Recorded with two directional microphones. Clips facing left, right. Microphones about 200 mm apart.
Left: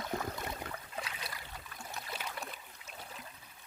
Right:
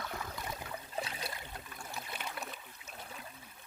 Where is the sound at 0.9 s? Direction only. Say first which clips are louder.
Right 3 dB; 30° right (ahead or behind).